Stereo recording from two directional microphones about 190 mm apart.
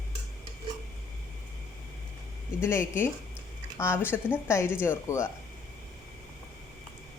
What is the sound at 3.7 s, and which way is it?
Speech, 15° left (ahead or behind).